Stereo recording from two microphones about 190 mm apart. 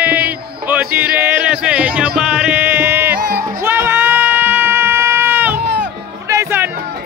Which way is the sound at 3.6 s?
10° right (ahead or behind).